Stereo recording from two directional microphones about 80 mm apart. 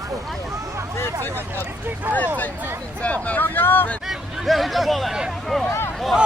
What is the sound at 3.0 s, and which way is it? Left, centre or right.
Speech, centre.